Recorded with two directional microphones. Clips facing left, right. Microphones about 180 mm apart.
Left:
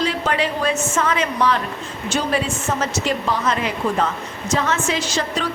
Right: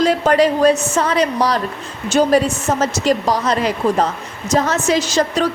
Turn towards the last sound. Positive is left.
turn(degrees=-40)  # may be behind; listen again after turning